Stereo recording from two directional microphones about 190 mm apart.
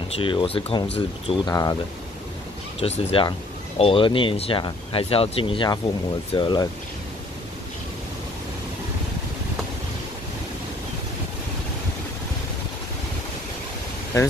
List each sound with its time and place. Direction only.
0.1 s speech: 25° left (ahead or behind)
2.8 s speech: 30° left (ahead or behind)